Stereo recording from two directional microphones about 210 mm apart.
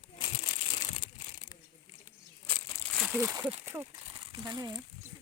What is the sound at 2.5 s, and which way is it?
Crumpling, 5° left (ahead or behind).